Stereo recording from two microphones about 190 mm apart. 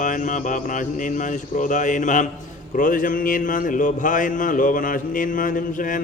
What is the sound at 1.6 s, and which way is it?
Speech, 40° left (ahead or behind).